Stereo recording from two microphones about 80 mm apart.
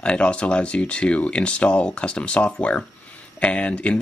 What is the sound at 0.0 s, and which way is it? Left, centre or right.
Speech, centre.